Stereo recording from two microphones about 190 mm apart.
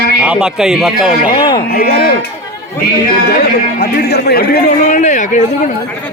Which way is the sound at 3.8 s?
60° left (ahead or behind).